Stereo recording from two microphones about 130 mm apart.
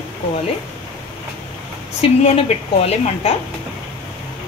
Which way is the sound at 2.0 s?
45° left (ahead or behind).